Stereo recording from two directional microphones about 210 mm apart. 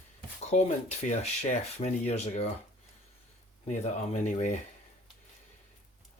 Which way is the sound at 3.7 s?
35° left (ahead or behind).